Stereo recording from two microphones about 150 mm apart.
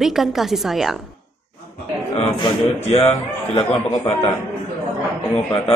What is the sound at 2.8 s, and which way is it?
A man's voice, 45° left (ahead or behind).